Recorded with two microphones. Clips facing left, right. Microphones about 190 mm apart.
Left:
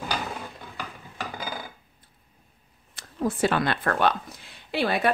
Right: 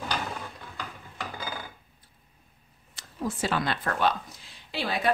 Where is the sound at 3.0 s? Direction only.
55° left (ahead or behind).